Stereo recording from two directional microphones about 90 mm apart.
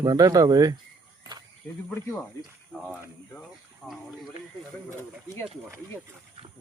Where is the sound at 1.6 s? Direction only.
20° left (ahead or behind).